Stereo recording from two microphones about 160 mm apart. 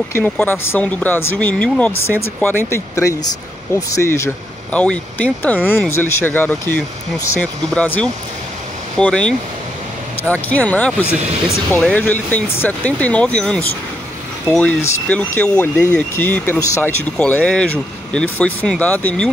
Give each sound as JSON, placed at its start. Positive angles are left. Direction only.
{"t": 0.2, "sound": "speech", "side_deg": 10}
{"t": 4.7, "sound": "speech", "side_deg": 10}